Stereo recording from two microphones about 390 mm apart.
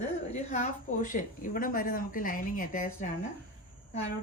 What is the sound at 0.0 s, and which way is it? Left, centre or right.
A woman's voice, centre.